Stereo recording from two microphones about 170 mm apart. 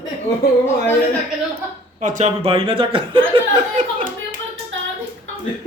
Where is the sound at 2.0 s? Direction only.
45° right (ahead or behind); by 3.2 s 30° right (ahead or behind).